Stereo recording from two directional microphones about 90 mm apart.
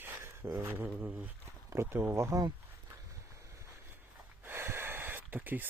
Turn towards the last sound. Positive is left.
turn(degrees=-20)  # may be behind; listen again after turning